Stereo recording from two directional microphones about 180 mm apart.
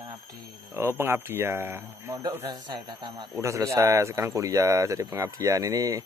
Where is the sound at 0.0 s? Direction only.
20° right (ahead or behind).